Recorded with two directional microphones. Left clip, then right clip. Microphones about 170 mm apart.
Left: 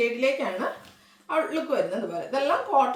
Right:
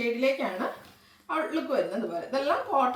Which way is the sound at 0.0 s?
15° left (ahead or behind).